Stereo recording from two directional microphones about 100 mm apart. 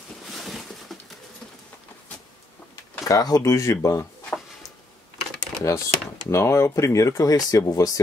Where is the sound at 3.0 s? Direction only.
35° left (ahead or behind).